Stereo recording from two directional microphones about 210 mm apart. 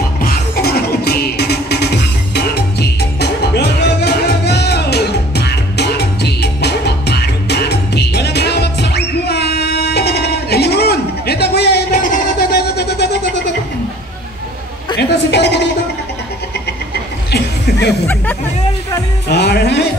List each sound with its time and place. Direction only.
0.2 s music: 45° left (ahead or behind)
15.0 s sheep: 55° left (ahead or behind)
17.3 s chuckle: 50° left (ahead or behind)
19.2 s music: 50° left (ahead or behind)